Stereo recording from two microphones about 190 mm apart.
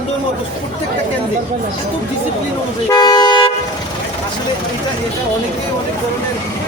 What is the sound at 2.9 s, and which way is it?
Toot, 20° left (ahead or behind).